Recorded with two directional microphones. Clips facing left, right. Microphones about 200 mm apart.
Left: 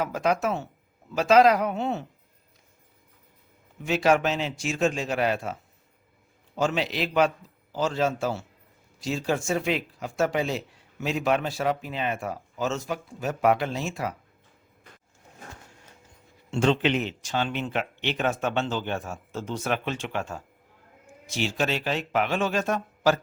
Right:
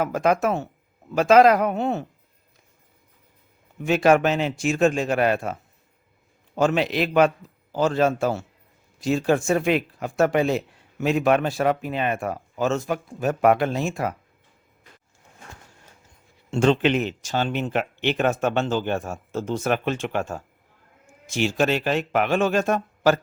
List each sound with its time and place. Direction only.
0.0 s speech: 55° right (ahead or behind)
3.8 s speech: 55° right (ahead or behind)
6.6 s speech: 55° right (ahead or behind)
16.5 s speech: 50° right (ahead or behind)